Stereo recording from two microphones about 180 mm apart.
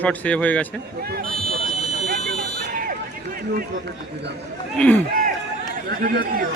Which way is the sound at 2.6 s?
55° right (ahead or behind).